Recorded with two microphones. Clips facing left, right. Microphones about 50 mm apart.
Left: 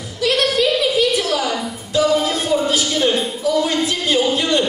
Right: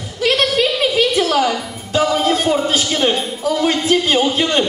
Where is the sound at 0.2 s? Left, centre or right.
Right.